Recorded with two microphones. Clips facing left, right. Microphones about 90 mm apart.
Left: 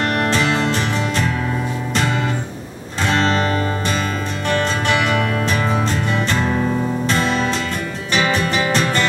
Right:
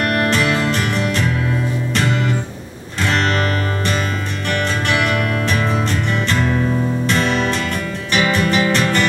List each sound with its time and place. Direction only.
0.3 s music: 25° left (ahead or behind)
5.4 s music: 20° left (ahead or behind)
8.1 s music: 25° left (ahead or behind)